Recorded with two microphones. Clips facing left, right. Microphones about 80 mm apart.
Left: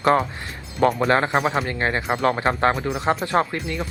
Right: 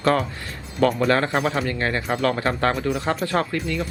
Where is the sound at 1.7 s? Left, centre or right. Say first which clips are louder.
Left 1 dB; left.